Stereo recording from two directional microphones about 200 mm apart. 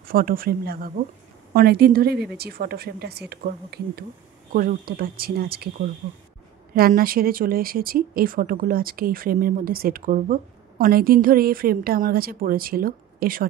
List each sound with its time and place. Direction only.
0.0 s speech: 45° right (ahead or behind)